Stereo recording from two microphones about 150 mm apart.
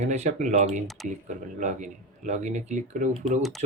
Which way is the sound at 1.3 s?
50° right (ahead or behind).